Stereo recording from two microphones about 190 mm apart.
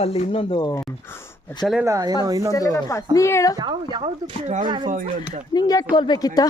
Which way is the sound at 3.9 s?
35° right (ahead or behind).